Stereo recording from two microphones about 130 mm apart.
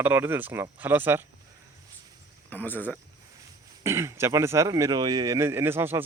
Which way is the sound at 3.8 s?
20° right (ahead or behind).